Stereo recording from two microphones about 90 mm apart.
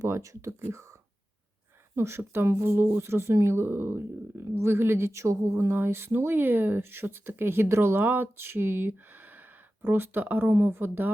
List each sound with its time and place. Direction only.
0.0 s speech: 35° right (ahead or behind)
2.0 s speech: 30° right (ahead or behind)